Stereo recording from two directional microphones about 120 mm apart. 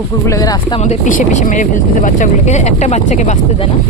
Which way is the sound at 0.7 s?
65° left (ahead or behind).